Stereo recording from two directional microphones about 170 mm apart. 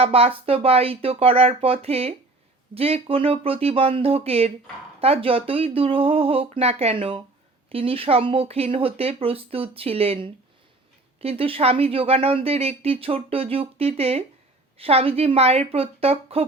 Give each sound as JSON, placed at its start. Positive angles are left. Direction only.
{"t": 0.0, "sound": "speech", "side_deg": -35}